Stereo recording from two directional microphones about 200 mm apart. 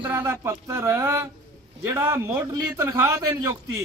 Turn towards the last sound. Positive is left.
turn(degrees=-15)  # may be behind; listen again after turning